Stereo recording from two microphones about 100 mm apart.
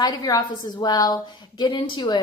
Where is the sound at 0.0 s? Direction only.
40° left (ahead or behind).